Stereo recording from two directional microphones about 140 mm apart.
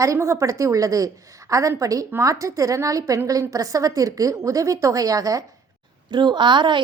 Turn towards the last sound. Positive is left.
turn(degrees=-35)  # may be behind; listen again after turning